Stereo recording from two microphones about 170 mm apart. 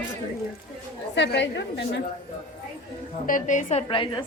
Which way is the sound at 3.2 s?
50° left (ahead or behind).